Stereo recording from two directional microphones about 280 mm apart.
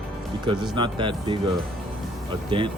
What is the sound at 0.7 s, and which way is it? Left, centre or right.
Speech, centre.